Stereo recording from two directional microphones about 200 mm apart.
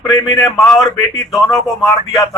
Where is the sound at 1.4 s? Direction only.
Centre (ahead or behind).